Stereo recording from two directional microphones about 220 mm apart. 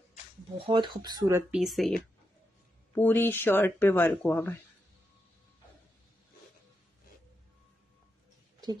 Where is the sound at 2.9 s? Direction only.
10° left (ahead or behind).